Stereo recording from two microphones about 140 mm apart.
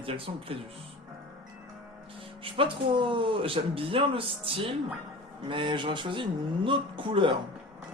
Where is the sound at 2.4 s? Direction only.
35° right (ahead or behind).